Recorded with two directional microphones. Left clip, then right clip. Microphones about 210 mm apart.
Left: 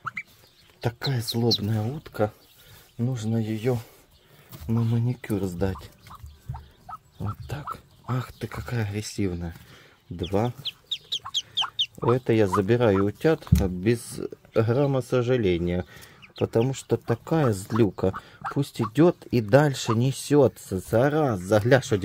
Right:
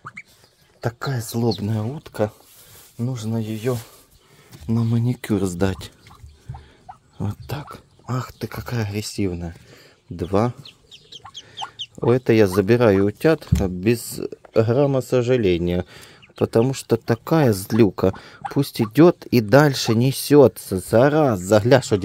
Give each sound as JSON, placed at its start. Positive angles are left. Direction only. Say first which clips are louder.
{"t": 0.7, "sound": "speech", "louder": "right 3 dB", "side_deg": -10}
{"t": 1.6, "sound": "speech", "louder": "right 3 dB", "side_deg": -25}
{"t": 4.6, "sound": "speech", "louder": "right 5 dB", "side_deg": -35}
{"t": 7.2, "sound": "speech", "louder": "right 9 dB", "side_deg": -30}
{"t": 8.1, "sound": "speech", "louder": "right 4 dB", "side_deg": -15}
{"t": 12.1, "sound": "speech", "louder": "right 6 dB", "side_deg": -25}